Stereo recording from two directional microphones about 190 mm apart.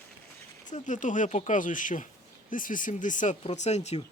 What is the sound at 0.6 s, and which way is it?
Speech, 40° left (ahead or behind).